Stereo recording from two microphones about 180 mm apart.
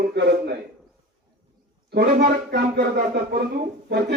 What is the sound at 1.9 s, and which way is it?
A man's voice, 60° right (ahead or behind).